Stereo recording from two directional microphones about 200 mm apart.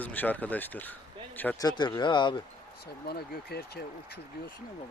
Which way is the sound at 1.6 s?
20° left (ahead or behind).